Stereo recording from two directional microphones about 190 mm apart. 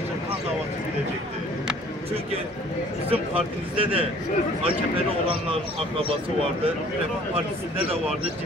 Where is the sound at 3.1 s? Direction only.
30° right (ahead or behind).